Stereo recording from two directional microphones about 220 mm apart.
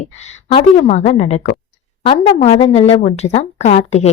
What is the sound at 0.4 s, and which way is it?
A woman's voice, 25° left (ahead or behind).